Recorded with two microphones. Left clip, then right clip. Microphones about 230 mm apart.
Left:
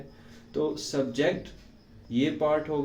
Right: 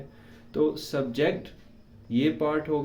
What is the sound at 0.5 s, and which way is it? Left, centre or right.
Speech, right.